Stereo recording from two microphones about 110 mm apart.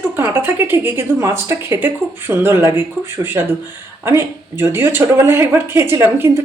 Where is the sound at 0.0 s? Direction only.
20° right (ahead or behind).